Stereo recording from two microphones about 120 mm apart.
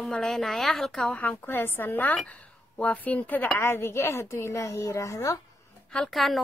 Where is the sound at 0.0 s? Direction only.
5° left (ahead or behind); by 5.4 s 25° left (ahead or behind).